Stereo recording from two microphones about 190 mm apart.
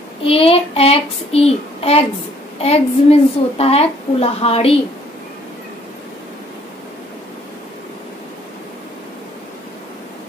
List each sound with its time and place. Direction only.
0.2 s a woman's voice: 30° left (ahead or behind)